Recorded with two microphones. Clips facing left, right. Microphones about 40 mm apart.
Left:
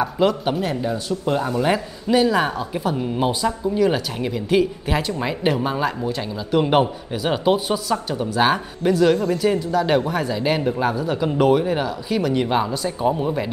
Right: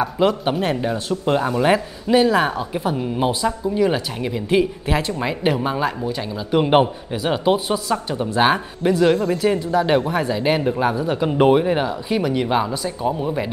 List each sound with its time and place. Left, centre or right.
0.0 s speech: centre
0.6 s speech: right
1.5 s speech: centre
6.5 s speech: centre
7.1 s speech: centre